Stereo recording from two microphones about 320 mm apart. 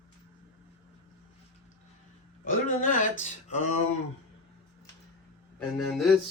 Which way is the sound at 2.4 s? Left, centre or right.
Left.